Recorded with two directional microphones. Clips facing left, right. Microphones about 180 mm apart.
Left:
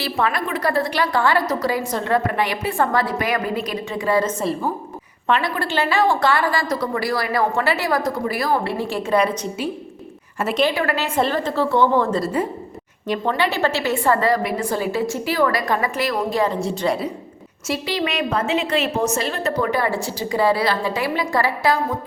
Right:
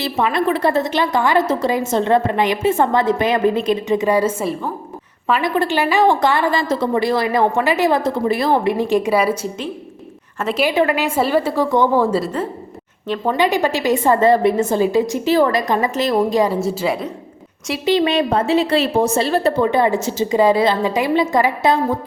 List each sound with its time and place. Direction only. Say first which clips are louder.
0.0 s a woman's voice: right 4 dB; 20° right (ahead or behind)
5.4 s a woman's voice: right 5 dB; 20° right (ahead or behind)
9.1 s a woman's voice: right 2 dB; 5° right (ahead or behind)
10.6 s a woman's voice: right 4 dB; 15° right (ahead or behind)
16.6 s a woman's voice: right 2 dB; centre (ahead or behind)
17.8 s a woman's voice: right 10 dB; 25° right (ahead or behind)